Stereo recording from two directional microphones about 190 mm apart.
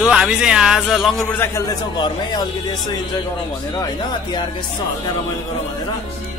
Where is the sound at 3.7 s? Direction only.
20° left (ahead or behind).